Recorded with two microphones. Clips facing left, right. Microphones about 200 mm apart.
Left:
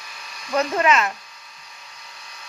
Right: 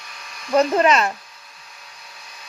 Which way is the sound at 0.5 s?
35° right (ahead or behind).